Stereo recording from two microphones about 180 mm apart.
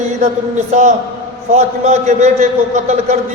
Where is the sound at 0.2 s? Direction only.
40° right (ahead or behind).